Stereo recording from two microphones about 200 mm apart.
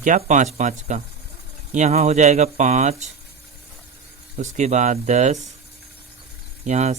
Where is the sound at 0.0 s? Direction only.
40° right (ahead or behind).